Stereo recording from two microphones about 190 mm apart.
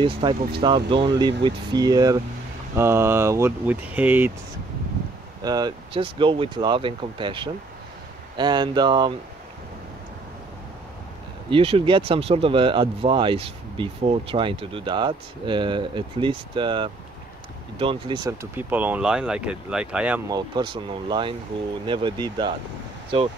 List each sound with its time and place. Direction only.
0.0 s speech: 25° right (ahead or behind); by 4.3 s 10° right (ahead or behind)
5.4 s speech: 20° right (ahead or behind)
11.5 s speech: 30° right (ahead or behind)
18.6 s speech: 10° right (ahead or behind)
20.2 s speech: 20° right (ahead or behind)